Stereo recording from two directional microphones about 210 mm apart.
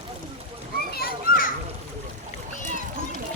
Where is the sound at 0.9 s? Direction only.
45° left (ahead or behind).